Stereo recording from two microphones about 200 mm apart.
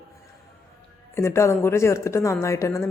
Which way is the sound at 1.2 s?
15° left (ahead or behind).